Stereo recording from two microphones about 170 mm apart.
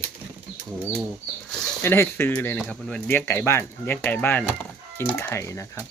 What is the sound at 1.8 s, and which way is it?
Speech, 15° left (ahead or behind).